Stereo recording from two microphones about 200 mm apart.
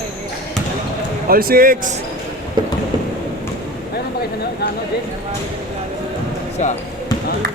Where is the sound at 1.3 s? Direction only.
45° right (ahead or behind).